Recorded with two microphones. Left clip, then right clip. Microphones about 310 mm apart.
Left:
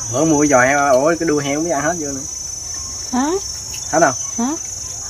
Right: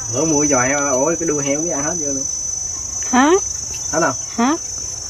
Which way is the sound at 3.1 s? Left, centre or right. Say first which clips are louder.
Right 6 dB; centre.